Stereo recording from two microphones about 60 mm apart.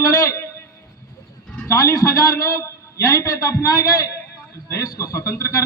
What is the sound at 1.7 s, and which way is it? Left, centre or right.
A man's voice, left.